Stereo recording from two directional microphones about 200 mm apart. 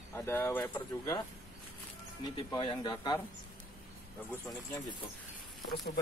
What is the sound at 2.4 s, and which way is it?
Speech, 25° left (ahead or behind).